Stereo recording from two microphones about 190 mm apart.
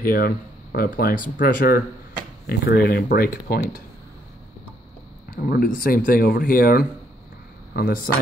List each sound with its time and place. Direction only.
0.0 s speech: 50° left (ahead or behind)
5.3 s speech: 50° left (ahead or behind)